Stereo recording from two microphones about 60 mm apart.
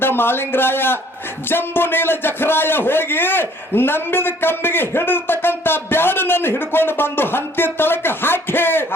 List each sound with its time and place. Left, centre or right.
0.0 s a man's voice: left